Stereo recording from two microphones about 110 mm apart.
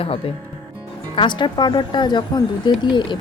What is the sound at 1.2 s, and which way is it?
A woman's voice, 45° left (ahead or behind).